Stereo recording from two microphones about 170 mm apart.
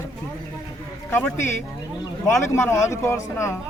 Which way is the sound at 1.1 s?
10° left (ahead or behind).